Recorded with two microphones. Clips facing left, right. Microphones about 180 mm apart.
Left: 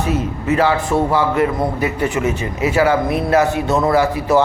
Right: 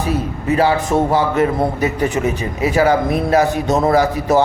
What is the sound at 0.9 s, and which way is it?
A man's voice, 20° right (ahead or behind).